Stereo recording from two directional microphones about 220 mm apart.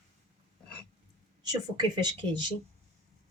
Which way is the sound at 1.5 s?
20° right (ahead or behind).